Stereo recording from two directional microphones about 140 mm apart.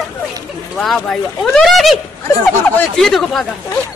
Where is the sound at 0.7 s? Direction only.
Centre (ahead or behind).